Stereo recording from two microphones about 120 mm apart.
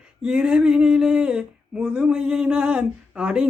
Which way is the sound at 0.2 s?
5° right (ahead or behind).